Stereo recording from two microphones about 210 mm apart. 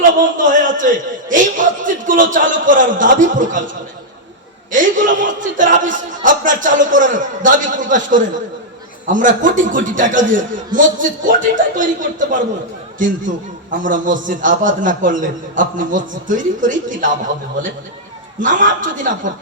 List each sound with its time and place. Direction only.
0.2 s speech: 40° right (ahead or behind)
4.7 s a man's voice: 40° right (ahead or behind)
18.4 s speech: 40° right (ahead or behind)